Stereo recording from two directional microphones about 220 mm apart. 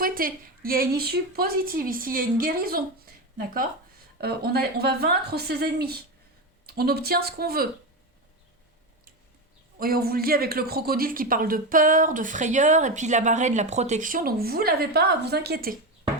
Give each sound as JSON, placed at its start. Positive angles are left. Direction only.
{"t": 0.0, "sound": "a woman's voice", "side_deg": -40}
{"t": 9.7, "sound": "speech", "side_deg": -40}